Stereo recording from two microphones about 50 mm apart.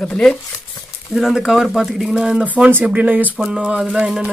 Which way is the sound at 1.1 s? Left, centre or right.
Centre.